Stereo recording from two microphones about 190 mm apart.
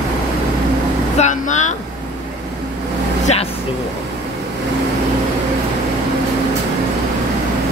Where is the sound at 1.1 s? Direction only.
40° left (ahead or behind).